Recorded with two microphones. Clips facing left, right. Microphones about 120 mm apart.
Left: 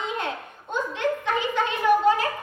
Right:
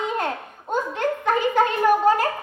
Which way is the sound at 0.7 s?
45° right (ahead or behind).